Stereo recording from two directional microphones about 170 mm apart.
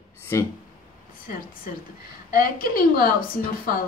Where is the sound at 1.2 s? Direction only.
55° left (ahead or behind).